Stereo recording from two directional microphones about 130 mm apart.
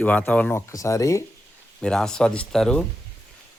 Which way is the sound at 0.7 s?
25° left (ahead or behind).